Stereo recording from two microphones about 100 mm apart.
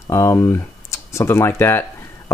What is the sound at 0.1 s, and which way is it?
Speech, 30° left (ahead or behind).